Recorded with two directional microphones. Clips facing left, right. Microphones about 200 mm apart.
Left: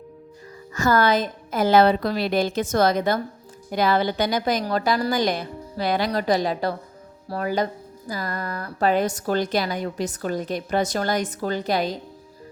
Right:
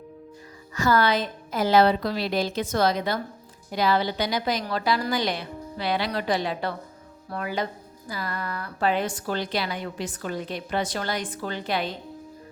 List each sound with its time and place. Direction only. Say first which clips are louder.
0.7 s a woman's voice: left 2 dB; 45° left (ahead or behind)